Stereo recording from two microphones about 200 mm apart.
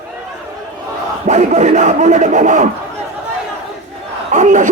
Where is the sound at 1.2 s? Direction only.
35° right (ahead or behind).